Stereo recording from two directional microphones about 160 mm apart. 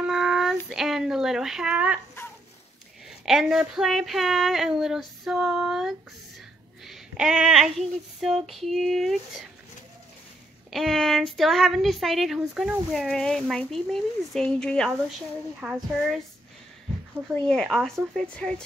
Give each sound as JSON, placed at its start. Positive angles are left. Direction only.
{"t": 0.0, "sound": "child singing", "side_deg": -5}
{"t": 0.7, "sound": "speech", "side_deg": 0}
{"t": 2.2, "sound": "dog", "side_deg": 15}
{"t": 3.1, "sound": "speech", "side_deg": -5}
{"t": 10.7, "sound": "speech", "side_deg": 0}
{"t": 15.6, "sound": "speech", "side_deg": -5}
{"t": 17.3, "sound": "speech", "side_deg": 0}